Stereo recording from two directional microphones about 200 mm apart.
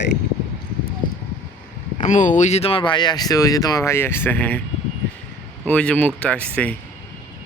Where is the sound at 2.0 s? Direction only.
40° left (ahead or behind); by 4.6 s 10° left (ahead or behind).